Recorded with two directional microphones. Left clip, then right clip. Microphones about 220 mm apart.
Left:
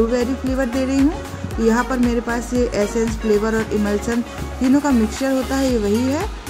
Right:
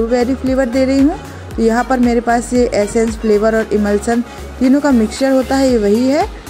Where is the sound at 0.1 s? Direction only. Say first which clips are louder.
Right 6 dB; 15° right (ahead or behind).